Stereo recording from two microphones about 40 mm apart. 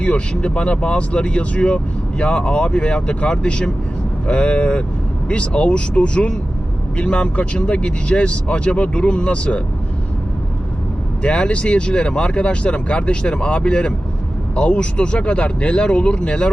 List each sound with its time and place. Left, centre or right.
0.0 s speech: left
11.2 s speech: left